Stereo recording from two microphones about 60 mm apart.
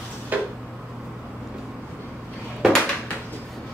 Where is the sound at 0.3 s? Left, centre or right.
Right.